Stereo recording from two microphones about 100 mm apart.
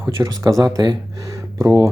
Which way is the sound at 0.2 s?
40° right (ahead or behind).